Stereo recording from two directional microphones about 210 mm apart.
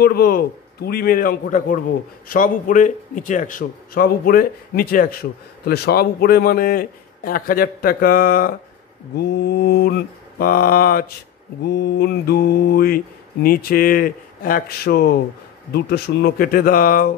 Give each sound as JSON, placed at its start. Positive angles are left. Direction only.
{"t": 0.0, "sound": "mantra", "side_deg": 45}
{"t": 2.2, "sound": "speech", "side_deg": 40}
{"t": 5.7, "sound": "mantra", "side_deg": 45}